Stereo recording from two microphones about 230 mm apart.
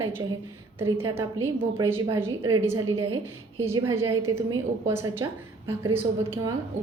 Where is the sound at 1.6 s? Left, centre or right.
Centre.